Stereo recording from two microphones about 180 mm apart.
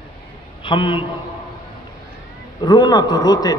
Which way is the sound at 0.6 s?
30° left (ahead or behind).